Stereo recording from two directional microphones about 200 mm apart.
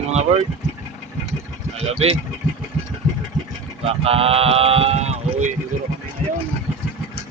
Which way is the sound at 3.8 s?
30° right (ahead or behind).